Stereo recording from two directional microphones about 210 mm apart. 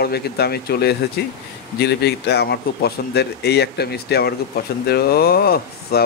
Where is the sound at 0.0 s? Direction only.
50° left (ahead or behind).